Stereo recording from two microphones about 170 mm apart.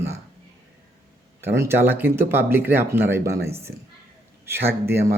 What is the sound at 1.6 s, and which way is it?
Speech, 15° right (ahead or behind).